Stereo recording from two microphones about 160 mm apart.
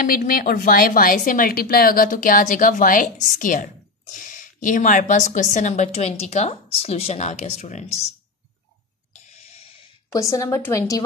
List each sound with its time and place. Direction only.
0.0 s a woman's voice: 65° left (ahead or behind); by 8.0 s 45° left (ahead or behind)
9.5 s a sound: 40° left (ahead or behind)
10.1 s a woman's voice: 20° left (ahead or behind)